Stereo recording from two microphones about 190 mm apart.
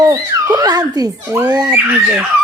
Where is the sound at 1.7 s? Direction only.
10° right (ahead or behind).